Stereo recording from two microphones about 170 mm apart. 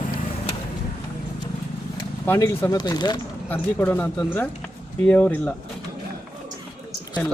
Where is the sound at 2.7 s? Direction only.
25° left (ahead or behind).